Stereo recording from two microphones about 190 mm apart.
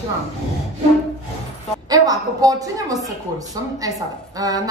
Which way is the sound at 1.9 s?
20° right (ahead or behind).